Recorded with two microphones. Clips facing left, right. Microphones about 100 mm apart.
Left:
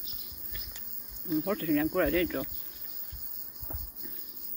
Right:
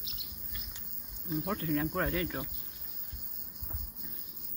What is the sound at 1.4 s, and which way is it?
Speech, 15° right (ahead or behind).